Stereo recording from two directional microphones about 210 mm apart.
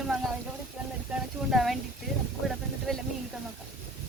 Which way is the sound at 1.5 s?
Centre (ahead or behind).